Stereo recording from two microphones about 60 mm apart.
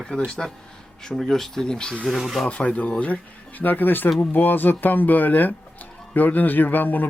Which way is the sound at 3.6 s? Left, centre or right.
Left.